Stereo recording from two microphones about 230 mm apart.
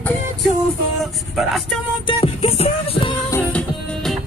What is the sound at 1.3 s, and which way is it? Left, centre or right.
Vehicle, centre.